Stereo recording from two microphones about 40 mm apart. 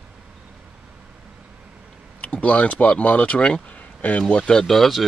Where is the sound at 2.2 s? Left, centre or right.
Left.